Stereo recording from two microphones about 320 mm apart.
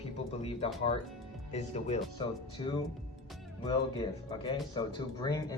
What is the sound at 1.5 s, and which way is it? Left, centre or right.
Speech, centre.